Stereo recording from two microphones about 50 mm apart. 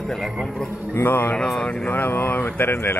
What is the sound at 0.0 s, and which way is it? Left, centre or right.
Speech, centre.